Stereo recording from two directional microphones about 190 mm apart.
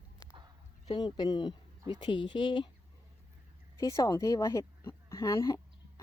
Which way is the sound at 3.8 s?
15° left (ahead or behind).